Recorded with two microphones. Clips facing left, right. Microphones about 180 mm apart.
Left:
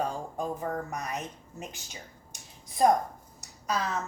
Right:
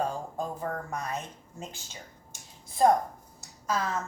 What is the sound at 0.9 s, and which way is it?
Speech, 15° left (ahead or behind).